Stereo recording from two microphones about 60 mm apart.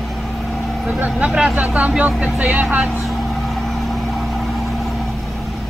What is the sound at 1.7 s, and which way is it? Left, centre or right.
Speech, centre.